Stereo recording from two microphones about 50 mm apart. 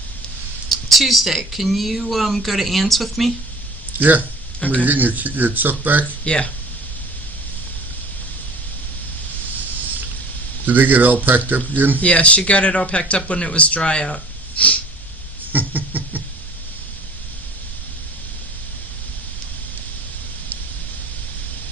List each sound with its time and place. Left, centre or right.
0.7 s speech: centre
3.9 s speech: right
4.6 s speech: left
4.9 s speech: right
6.2 s speech: left
10.7 s speech: right
11.9 s speech: left
15.5 s a sound: right